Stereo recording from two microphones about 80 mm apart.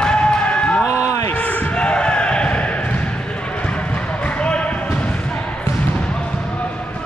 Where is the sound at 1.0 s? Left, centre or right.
Left.